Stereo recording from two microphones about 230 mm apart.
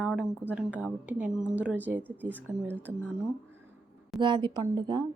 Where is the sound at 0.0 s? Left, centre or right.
Centre.